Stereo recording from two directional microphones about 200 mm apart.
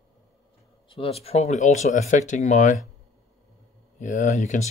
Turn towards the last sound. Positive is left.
turn(degrees=35)  # may be behind; listen again after turning